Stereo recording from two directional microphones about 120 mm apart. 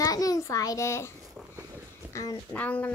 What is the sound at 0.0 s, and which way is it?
A child's voice, 30° left (ahead or behind).